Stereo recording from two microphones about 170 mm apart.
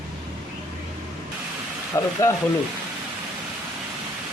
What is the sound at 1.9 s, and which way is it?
Speech, 20° left (ahead or behind).